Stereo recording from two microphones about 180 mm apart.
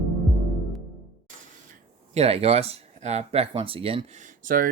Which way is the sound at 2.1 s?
35° right (ahead or behind).